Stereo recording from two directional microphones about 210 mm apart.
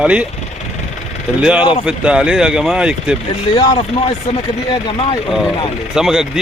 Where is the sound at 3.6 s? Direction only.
20° left (ahead or behind).